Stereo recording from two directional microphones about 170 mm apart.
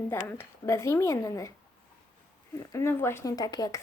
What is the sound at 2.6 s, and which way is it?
Speech, 15° left (ahead or behind).